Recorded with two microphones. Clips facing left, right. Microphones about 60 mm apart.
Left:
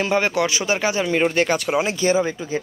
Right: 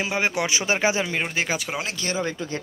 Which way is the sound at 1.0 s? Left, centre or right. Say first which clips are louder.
Left 7 dB; centre.